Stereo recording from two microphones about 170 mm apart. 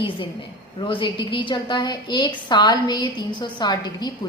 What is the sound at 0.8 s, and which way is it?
A woman's voice, 30° left (ahead or behind).